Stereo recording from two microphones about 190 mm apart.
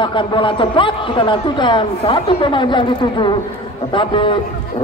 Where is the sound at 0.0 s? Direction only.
25° left (ahead or behind).